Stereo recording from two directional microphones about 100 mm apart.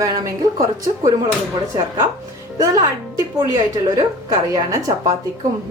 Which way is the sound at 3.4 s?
35° right (ahead or behind).